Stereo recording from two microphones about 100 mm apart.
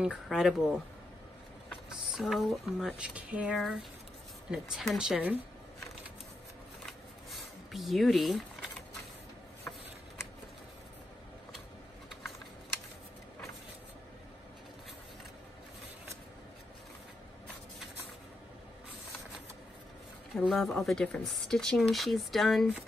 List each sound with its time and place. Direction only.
0.0 s speech: 5° right (ahead or behind)
2.0 s speech: centre (ahead or behind)
3.0 s speech: 10° right (ahead or behind)
6.9 s a sound: centre (ahead or behind)
20.3 s speech: centre (ahead or behind)